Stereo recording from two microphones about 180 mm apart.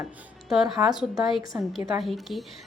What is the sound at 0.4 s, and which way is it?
A woman's voice, centre (ahead or behind).